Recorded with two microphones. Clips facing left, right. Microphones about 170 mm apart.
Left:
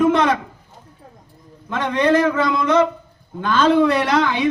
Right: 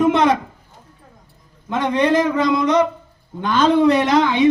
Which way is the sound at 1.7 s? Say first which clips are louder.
Even; 15° right (ahead or behind).